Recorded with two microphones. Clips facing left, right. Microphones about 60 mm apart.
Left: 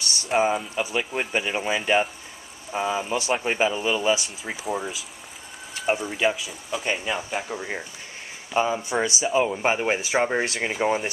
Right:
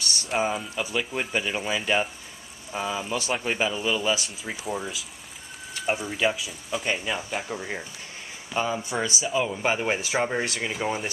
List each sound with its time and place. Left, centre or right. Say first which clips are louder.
0.4 s speech: left 4 dB; centre
9.3 s speech: left 3 dB; left
10.4 s speech: left 3 dB; left
10.7 s speech: left 5 dB; centre